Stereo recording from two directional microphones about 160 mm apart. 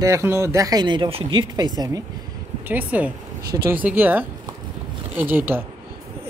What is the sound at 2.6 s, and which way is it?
Speech, 10° right (ahead or behind).